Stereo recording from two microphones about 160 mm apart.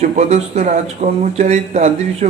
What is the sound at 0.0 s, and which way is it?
Speech, 45° right (ahead or behind).